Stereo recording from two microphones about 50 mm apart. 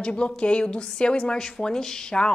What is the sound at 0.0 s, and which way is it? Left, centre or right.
A woman's voice, left.